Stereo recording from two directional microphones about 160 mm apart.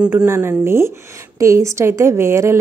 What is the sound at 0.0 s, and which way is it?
Speech, 10° right (ahead or behind).